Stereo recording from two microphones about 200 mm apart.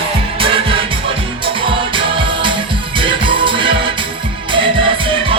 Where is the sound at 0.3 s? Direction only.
25° right (ahead or behind).